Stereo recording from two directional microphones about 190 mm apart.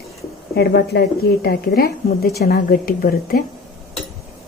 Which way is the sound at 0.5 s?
60° left (ahead or behind).